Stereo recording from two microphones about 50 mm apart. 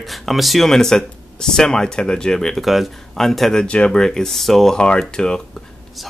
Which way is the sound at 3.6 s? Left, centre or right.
Left.